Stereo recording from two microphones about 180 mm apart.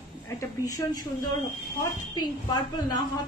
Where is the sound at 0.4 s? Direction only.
20° left (ahead or behind).